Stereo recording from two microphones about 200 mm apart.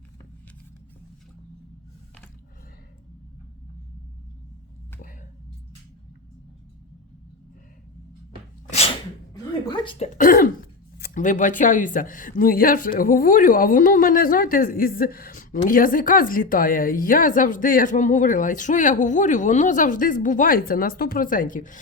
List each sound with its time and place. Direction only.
8.7 s sneeze: 30° left (ahead or behind)
9.3 s a sound: 20° left (ahead or behind)
10.2 s speech: 45° left (ahead or behind)